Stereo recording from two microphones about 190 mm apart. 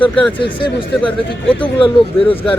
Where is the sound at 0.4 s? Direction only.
25° left (ahead or behind).